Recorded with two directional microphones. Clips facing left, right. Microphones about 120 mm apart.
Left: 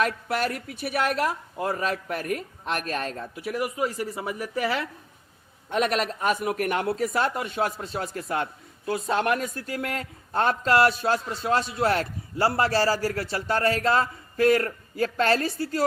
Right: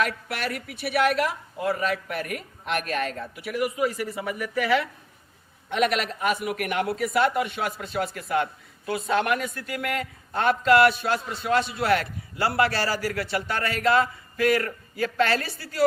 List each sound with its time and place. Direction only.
0.0 s a man's voice: 40° left (ahead or behind)